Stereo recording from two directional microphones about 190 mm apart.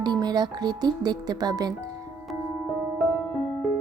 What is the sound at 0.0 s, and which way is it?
Speech, 20° right (ahead or behind).